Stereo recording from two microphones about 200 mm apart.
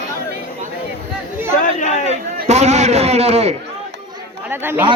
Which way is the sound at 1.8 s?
35° left (ahead or behind).